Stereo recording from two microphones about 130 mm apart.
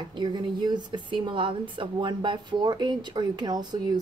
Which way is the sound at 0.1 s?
35° right (ahead or behind).